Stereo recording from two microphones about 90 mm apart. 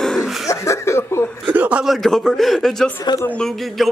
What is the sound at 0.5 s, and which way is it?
Chuckle, 35° left (ahead or behind).